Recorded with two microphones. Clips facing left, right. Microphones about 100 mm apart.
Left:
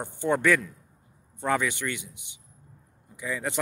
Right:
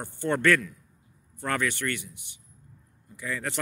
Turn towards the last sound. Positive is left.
turn(degrees=15)  # may be behind; listen again after turning